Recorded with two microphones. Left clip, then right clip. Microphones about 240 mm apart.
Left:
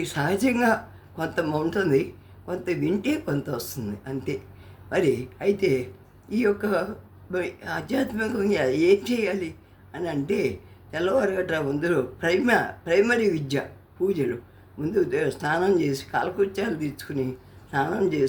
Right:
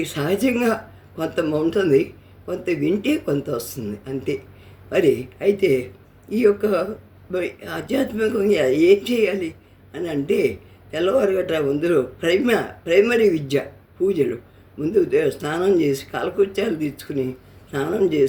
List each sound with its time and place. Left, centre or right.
0.0 s speech: centre